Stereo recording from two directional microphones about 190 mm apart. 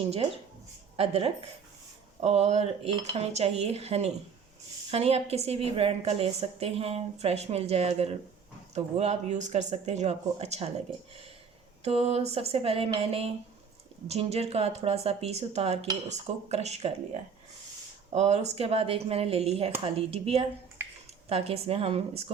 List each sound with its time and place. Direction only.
0.9 s a woman's voice: 30° right (ahead or behind)
11.8 s a woman's voice: 30° right (ahead or behind)
18.1 s a woman's voice: 35° right (ahead or behind)
20.8 s a sound: 10° right (ahead or behind)
21.2 s a woman's voice: 30° right (ahead or behind)